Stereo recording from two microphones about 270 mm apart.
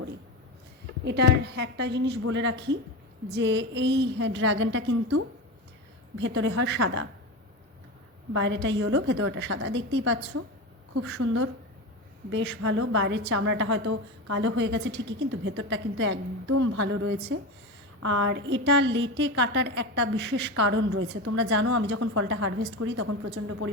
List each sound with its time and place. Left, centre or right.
1.0 s a woman's voice: right
8.3 s a woman's voice: right
16.5 s speech: right
16.8 s a woman's voice: right